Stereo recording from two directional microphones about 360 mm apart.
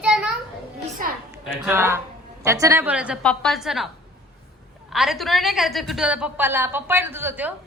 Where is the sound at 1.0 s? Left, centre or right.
Right.